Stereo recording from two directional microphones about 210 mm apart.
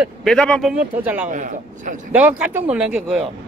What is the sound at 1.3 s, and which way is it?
Speech, 40° right (ahead or behind).